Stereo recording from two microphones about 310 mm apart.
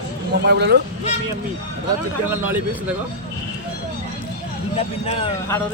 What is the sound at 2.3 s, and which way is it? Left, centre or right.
Speech, centre.